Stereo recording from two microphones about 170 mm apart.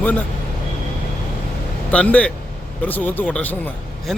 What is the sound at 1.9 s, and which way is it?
A man's voice, 5° left (ahead or behind).